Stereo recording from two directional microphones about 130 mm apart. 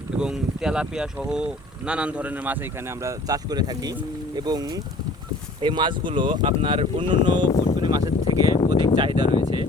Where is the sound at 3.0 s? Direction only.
30° right (ahead or behind).